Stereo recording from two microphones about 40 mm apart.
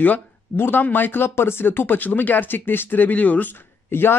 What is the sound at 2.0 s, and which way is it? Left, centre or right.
Speech, left.